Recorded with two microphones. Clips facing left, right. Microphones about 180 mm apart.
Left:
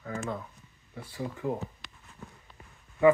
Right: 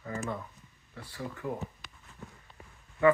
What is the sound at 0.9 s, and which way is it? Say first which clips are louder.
Speech: left 3 dB; 15° left (ahead or behind).